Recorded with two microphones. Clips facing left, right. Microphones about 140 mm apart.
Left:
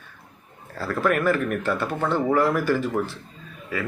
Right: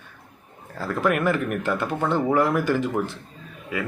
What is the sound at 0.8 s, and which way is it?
Speech, 15° right (ahead or behind).